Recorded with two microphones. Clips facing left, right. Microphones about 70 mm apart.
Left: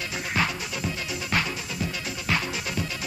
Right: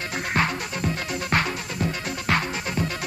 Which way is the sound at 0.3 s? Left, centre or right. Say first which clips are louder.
Right 3 dB; right.